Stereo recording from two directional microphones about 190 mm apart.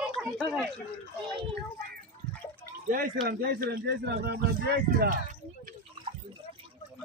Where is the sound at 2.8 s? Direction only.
45° right (ahead or behind).